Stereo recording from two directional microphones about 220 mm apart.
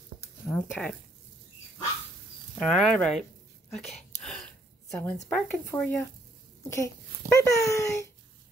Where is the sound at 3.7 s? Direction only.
Centre (ahead or behind).